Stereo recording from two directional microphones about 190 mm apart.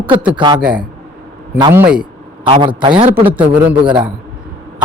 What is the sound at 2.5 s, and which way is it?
Speech, 25° right (ahead or behind).